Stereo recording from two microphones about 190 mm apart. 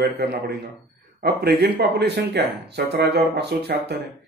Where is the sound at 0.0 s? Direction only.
60° right (ahead or behind).